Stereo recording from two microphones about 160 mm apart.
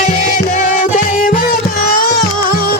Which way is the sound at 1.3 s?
60° left (ahead or behind).